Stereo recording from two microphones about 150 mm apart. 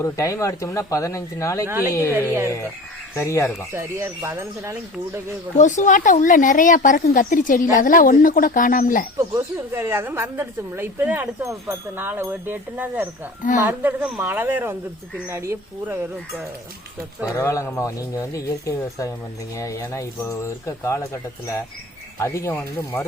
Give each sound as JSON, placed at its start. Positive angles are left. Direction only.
{"t": 0.0, "sound": "speech", "side_deg": 20}
{"t": 1.6, "sound": "a woman's voice", "side_deg": -15}
{"t": 1.9, "sound": "speech", "side_deg": 20}
{"t": 2.1, "sound": "a woman's voice", "side_deg": -15}
{"t": 3.2, "sound": "speech", "side_deg": 20}
{"t": 3.7, "sound": "a woman's voice", "side_deg": -15}
{"t": 5.5, "sound": "speech", "side_deg": 55}
{"t": 9.3, "sound": "a woman's voice", "side_deg": -15}
{"t": 17.3, "sound": "speech", "side_deg": 20}